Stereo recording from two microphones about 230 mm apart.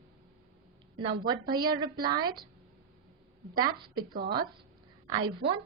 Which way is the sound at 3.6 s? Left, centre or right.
Centre.